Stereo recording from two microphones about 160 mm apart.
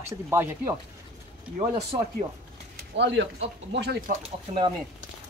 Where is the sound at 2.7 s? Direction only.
90° right.